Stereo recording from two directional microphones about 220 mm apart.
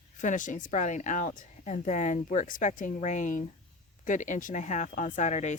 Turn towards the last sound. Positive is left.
turn(degrees=30)  # may be behind; listen again after turning